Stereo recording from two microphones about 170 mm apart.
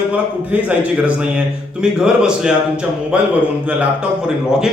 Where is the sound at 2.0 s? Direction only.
5° right (ahead or behind).